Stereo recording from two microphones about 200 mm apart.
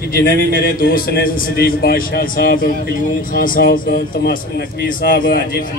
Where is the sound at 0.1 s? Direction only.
45° left (ahead or behind).